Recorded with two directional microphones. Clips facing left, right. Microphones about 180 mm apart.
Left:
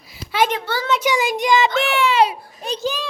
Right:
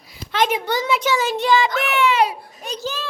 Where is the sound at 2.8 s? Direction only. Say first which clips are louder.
Left 4 dB; 15° left (ahead or behind).